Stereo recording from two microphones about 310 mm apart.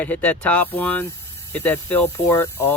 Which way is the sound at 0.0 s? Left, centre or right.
Centre.